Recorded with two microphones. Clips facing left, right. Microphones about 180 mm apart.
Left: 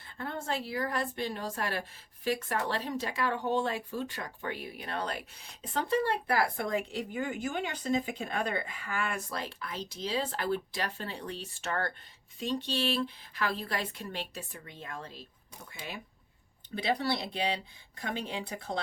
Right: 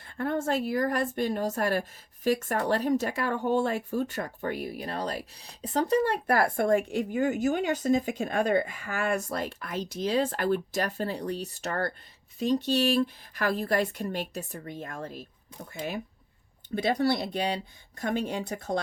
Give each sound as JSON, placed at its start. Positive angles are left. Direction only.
{"t": 0.2, "sound": "speech", "side_deg": -50}